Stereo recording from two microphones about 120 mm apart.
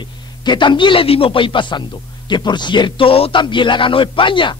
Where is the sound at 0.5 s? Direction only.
40° left (ahead or behind).